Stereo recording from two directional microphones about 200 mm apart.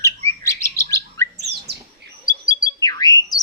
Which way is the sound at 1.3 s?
55° right (ahead or behind).